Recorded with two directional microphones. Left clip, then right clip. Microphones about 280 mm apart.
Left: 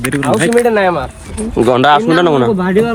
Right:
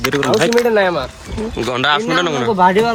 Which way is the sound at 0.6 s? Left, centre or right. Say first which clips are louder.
Left 2 dB; left.